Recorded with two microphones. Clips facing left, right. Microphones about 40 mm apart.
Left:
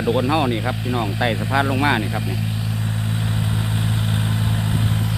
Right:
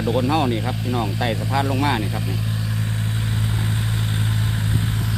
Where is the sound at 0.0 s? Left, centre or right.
Centre.